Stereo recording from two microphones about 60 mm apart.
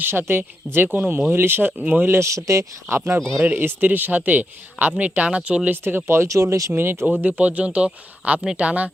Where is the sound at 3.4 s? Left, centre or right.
Right.